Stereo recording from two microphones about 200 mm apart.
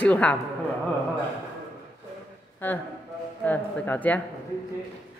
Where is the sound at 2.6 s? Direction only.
10° left (ahead or behind).